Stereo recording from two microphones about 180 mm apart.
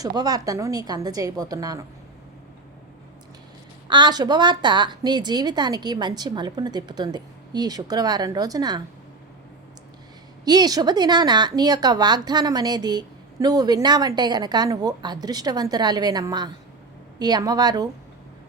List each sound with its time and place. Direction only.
0.0 s speech: 20° right (ahead or behind)
3.8 s speech: 25° right (ahead or behind)
10.4 s speech: 20° right (ahead or behind)